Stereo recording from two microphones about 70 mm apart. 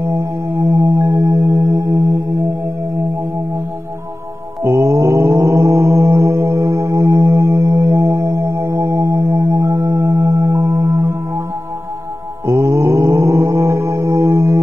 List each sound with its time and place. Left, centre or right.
0.6 s singing bowl: right
4.6 s mantra: right
12.4 s music: right